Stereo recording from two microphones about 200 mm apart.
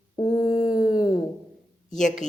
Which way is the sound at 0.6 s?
45° left (ahead or behind).